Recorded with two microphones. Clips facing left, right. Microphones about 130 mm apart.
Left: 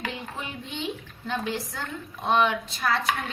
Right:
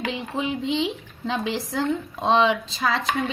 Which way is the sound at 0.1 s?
90° right.